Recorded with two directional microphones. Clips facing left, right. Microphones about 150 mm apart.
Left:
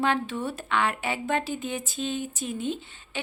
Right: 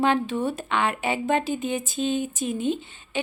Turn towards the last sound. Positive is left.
turn(degrees=-20)  # may be behind; listen again after turning